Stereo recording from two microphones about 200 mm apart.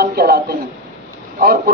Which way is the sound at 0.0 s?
50° right (ahead or behind).